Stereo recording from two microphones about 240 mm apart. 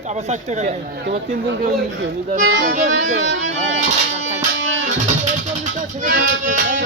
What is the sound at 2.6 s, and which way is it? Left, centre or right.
Music, right.